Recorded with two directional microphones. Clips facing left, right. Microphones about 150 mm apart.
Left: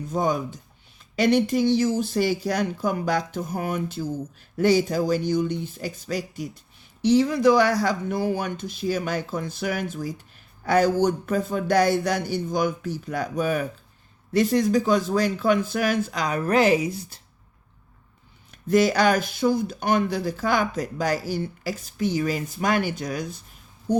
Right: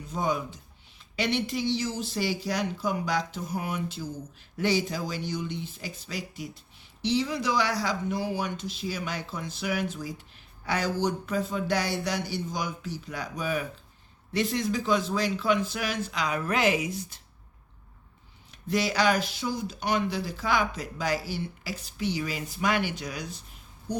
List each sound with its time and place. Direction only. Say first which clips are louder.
0.1 s speech: left 5 dB; 45° left (ahead or behind)
18.7 s speech: left 6 dB; 45° left (ahead or behind)
23.9 s a sound: left 9 dB; 50° left (ahead or behind)